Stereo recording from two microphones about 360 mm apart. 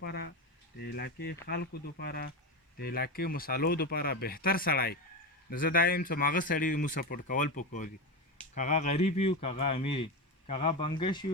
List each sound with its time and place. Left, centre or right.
0.0 s speech: left